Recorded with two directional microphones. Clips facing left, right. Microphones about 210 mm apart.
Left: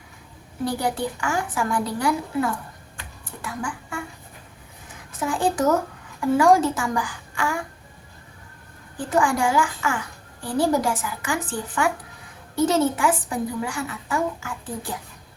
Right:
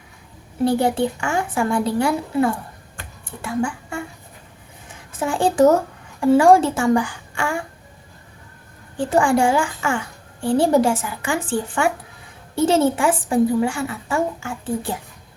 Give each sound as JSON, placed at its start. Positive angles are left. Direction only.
{"t": 0.6, "sound": "a woman's voice", "side_deg": -25}
{"t": 5.2, "sound": "speech", "side_deg": -30}
{"t": 9.0, "sound": "a woman's voice", "side_deg": -30}